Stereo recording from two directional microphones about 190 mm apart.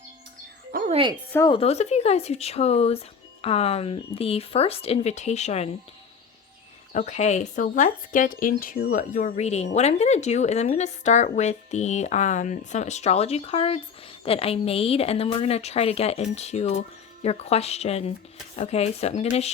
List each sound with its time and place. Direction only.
0.9 s a woman's voice: 30° right (ahead or behind)
1.3 s speech: 15° left (ahead or behind)
1.5 s speech: 35° left (ahead or behind)
6.9 s speech: 40° left (ahead or behind)